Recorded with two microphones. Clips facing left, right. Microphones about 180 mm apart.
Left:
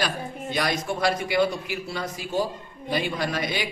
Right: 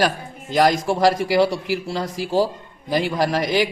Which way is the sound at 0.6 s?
90° right.